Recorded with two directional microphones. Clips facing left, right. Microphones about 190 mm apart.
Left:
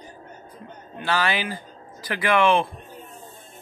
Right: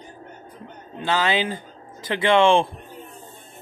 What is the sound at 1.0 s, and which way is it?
Speech, 20° right (ahead or behind).